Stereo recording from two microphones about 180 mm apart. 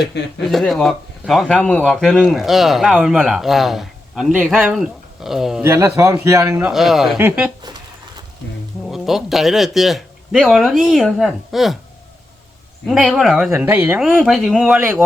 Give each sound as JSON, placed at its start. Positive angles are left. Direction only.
{"t": 0.1, "sound": "speech", "side_deg": 70}
{"t": 0.4, "sound": "a man's voice", "side_deg": 0}
{"t": 5.6, "sound": "speech", "side_deg": -15}
{"t": 8.9, "sound": "a man's voice", "side_deg": 0}
{"t": 12.9, "sound": "speech", "side_deg": 0}
{"t": 14.0, "sound": "a man's voice", "side_deg": 0}